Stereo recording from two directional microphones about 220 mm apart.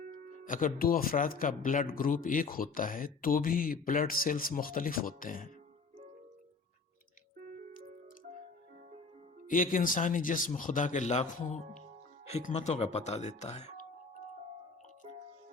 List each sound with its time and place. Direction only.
0.4 s speech: 40° left (ahead or behind)
9.5 s speech: 40° left (ahead or behind)